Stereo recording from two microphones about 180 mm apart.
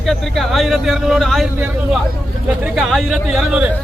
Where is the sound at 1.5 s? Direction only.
10° right (ahead or behind).